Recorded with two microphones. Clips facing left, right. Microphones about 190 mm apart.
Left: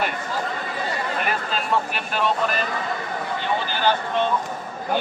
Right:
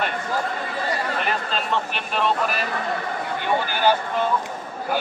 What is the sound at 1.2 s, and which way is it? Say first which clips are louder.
Speech: even; 5° left (ahead or behind).